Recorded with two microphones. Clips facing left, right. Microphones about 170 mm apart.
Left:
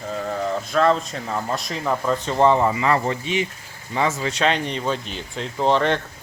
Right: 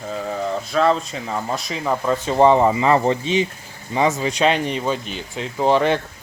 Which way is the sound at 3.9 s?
15° right (ahead or behind).